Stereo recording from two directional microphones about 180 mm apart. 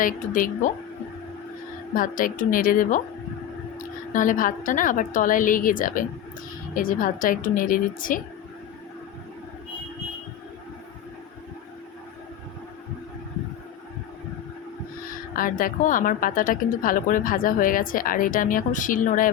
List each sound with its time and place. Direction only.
0.0 s a woman's voice: 50° left (ahead or behind)
2.0 s a woman's voice: 50° left (ahead or behind)
4.1 s a woman's voice: 45° left (ahead or behind)
15.1 s a woman's voice: 50° left (ahead or behind)